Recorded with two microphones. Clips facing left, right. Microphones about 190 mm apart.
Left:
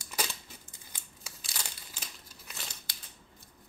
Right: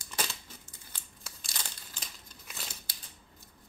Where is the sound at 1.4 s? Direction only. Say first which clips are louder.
Left 1 dB; 5° left (ahead or behind).